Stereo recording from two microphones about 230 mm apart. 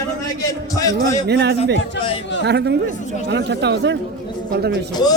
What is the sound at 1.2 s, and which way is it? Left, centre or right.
Speech, right.